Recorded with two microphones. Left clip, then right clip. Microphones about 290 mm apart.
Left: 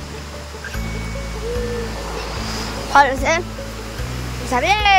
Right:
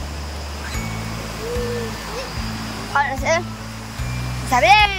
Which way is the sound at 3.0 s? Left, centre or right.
Centre.